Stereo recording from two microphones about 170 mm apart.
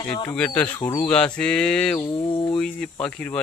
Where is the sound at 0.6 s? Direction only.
10° left (ahead or behind).